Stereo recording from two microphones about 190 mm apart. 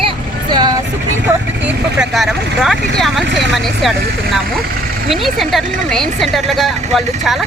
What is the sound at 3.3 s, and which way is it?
Speech, 70° right (ahead or behind).